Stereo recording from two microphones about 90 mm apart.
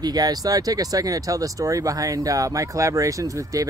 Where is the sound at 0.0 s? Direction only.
45° right (ahead or behind).